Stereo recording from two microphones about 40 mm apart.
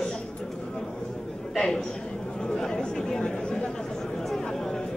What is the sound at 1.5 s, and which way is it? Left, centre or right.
Speech, centre.